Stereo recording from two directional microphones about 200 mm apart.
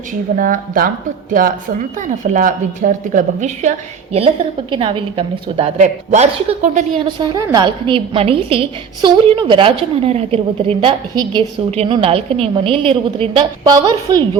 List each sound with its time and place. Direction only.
0.3 s a woman's voice: 40° right (ahead or behind); by 14.2 s 20° right (ahead or behind)